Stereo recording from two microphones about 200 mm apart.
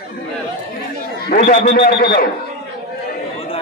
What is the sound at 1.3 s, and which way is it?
Speech, 45° left (ahead or behind).